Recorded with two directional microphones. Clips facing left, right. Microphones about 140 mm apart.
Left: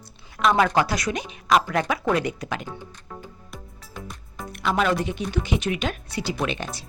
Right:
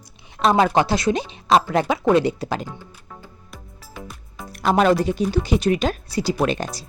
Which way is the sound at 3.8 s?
Centre (ahead or behind).